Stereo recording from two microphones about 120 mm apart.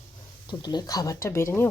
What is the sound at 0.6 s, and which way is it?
Speech, 35° left (ahead or behind).